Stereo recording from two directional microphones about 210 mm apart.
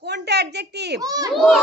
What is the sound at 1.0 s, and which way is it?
Speech, 15° right (ahead or behind).